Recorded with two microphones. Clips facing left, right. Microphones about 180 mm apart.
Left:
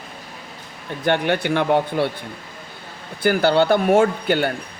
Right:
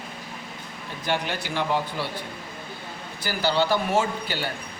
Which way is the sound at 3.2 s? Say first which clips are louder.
Left 8 dB; 55° left (ahead or behind).